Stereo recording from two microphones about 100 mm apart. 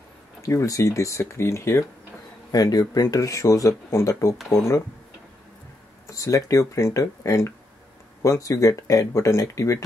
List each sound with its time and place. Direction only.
0.4 s speech: 30° left (ahead or behind)
6.0 s speech: 35° left (ahead or behind)